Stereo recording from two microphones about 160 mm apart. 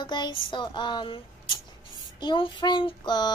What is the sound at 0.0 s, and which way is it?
Child singing, 30° left (ahead or behind).